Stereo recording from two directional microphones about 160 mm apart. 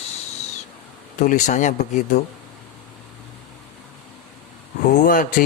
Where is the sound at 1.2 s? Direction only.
50° left (ahead or behind).